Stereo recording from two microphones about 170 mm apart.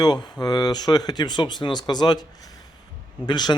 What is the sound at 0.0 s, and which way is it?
Speech, 25° left (ahead or behind).